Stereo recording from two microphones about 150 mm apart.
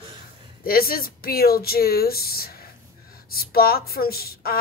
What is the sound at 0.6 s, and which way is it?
A woman's voice, 80° left.